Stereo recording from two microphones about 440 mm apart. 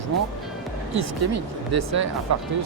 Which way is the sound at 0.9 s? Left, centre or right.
Right.